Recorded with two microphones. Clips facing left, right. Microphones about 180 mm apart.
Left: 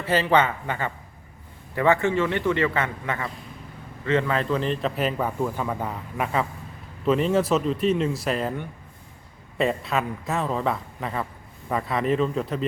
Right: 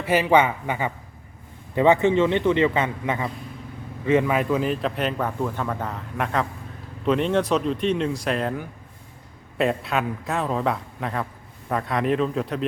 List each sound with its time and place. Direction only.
0.0 s a man's voice: 15° right (ahead or behind)